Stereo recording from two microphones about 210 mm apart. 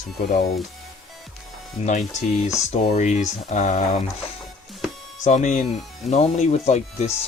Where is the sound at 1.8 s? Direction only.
35° left (ahead or behind).